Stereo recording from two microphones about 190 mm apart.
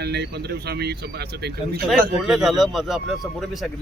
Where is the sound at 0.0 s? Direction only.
60° right (ahead or behind).